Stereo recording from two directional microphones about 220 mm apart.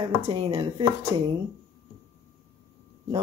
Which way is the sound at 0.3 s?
20° right (ahead or behind).